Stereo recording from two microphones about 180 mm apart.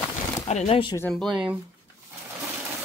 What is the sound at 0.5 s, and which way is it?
Speech, 35° left (ahead or behind).